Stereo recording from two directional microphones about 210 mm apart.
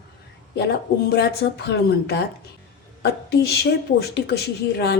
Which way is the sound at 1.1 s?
50° left (ahead or behind).